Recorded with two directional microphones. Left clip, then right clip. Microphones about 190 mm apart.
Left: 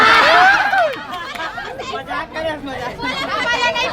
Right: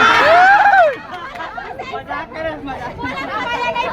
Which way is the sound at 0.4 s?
35° right (ahead or behind).